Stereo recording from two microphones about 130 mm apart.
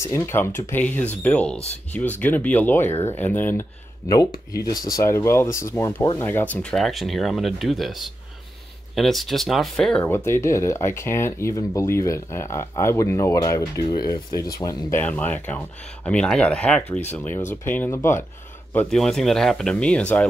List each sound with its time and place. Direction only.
0.0 s speech: 20° left (ahead or behind)
4.1 s speech: 30° left (ahead or behind); by 10.0 s 5° left (ahead or behind)
10.0 s speech: 20° left (ahead or behind)
18.7 s speech: 10° left (ahead or behind)